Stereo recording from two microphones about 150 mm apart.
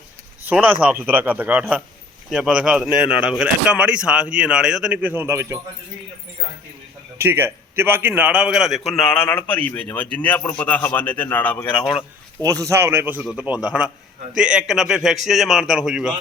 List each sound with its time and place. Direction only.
0.6 s speech: 10° right (ahead or behind)
7.2 s a man's voice: 15° right (ahead or behind); by 11.8 s 10° left (ahead or behind)
12.4 s a man's voice: 25° right (ahead or behind); by 16.1 s centre (ahead or behind)